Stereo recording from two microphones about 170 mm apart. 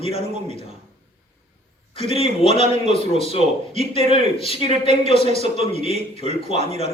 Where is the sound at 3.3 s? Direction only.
35° left (ahead or behind).